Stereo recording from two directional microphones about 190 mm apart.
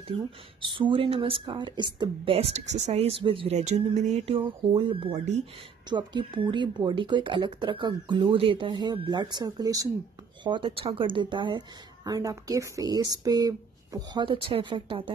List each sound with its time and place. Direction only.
0.1 s speech: 30° right (ahead or behind)
5.9 s speech: 25° right (ahead or behind)